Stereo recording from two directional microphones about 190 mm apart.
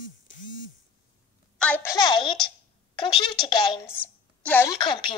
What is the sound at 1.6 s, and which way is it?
Speech, 10° left (ahead or behind).